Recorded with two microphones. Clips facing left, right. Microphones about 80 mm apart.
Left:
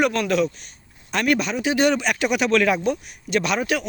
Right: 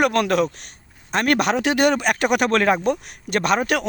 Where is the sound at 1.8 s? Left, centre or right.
Right.